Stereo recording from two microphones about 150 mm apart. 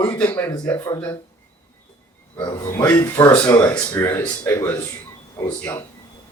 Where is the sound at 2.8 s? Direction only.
20° left (ahead or behind).